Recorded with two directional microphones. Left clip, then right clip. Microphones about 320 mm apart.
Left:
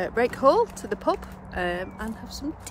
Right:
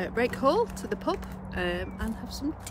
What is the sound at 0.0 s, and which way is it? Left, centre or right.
Speech, centre.